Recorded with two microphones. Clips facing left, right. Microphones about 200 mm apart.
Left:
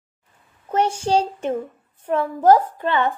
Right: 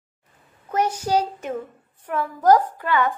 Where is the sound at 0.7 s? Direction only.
30° left (ahead or behind).